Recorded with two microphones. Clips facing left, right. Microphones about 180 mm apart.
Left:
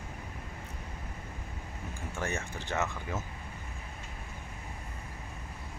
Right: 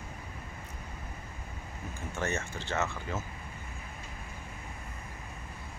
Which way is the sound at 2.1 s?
15° left (ahead or behind).